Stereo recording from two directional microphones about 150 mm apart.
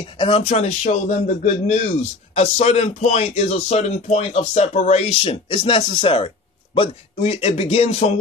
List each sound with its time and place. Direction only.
0.0 s a man's voice: 40° left (ahead or behind)